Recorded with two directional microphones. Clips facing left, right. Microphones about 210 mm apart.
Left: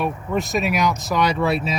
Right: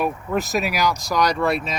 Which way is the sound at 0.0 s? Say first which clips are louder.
Even; centre (ahead or behind).